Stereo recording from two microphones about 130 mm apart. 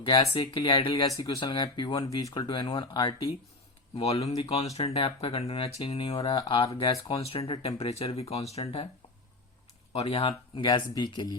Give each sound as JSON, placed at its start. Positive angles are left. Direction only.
{"t": 0.3, "sound": "speech", "side_deg": 35}
{"t": 1.0, "sound": "speech", "side_deg": 25}
{"t": 3.9, "sound": "speech", "side_deg": 50}
{"t": 6.4, "sound": "speech", "side_deg": 35}
{"t": 9.9, "sound": "speech", "side_deg": 50}